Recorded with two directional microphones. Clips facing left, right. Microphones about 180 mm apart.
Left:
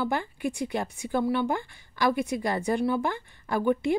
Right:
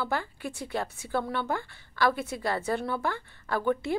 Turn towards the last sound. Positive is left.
turn(degrees=15)  # may be behind; listen again after turning